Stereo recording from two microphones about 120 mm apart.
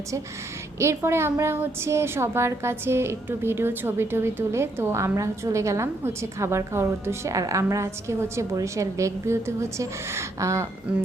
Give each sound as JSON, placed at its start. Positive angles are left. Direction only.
{"t": 0.8, "sound": "a woman's voice", "side_deg": -20}